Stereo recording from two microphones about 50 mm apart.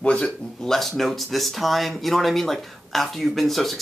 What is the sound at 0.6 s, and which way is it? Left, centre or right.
Speech, centre.